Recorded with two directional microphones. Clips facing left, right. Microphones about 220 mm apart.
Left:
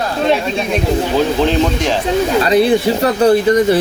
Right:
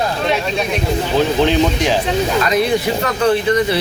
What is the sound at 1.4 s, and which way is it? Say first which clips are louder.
Speech: even; centre (ahead or behind).